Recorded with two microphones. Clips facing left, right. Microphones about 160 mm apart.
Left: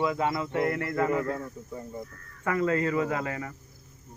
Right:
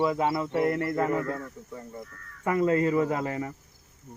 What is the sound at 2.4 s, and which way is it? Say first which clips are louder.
Speech: right 3 dB; 20° right (ahead or behind).